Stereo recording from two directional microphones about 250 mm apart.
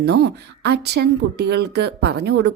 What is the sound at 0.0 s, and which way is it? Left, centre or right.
A woman's voice, right.